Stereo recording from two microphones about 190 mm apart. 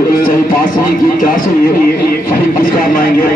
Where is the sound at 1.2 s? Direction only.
45° left (ahead or behind).